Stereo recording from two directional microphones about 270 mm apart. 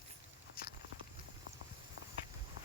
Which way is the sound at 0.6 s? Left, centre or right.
Left.